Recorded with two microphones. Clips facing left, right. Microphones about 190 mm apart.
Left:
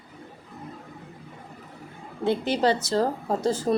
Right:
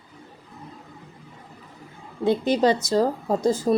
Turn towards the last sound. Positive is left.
turn(degrees=-15)  # may be behind; listen again after turning